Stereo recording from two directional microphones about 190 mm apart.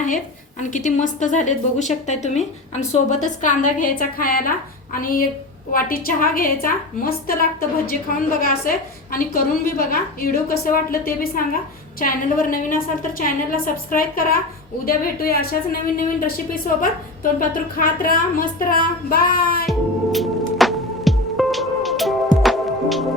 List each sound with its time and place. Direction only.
0.6 s a woman's voice: 40° left (ahead or behind)
19.6 s music: centre (ahead or behind)